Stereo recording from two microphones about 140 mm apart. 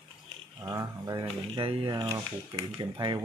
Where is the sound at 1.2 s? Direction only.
40° right (ahead or behind).